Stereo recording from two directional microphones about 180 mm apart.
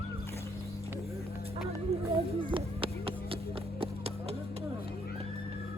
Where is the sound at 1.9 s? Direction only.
35° right (ahead or behind).